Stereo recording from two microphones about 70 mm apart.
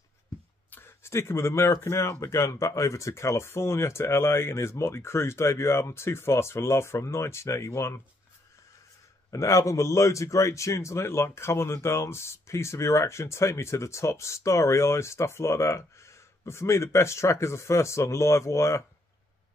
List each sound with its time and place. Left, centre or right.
0.7 s speech: left
9.3 s speech: left